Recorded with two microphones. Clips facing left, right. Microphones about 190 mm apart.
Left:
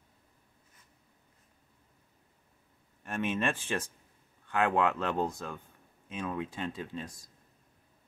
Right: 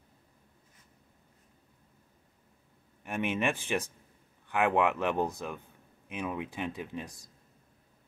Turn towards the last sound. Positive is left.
turn(degrees=-15)  # may be behind; listen again after turning